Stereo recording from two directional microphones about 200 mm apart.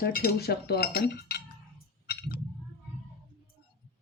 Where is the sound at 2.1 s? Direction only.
50° left (ahead or behind).